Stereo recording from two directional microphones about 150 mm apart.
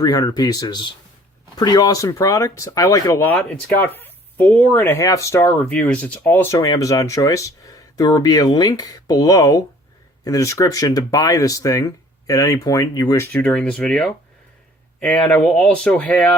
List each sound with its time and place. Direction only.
0.0 s speech: 25° left (ahead or behind)
5.6 s speech: 10° left (ahead or behind); by 13.2 s 25° left (ahead or behind)
13.3 s speech: 10° left (ahead or behind)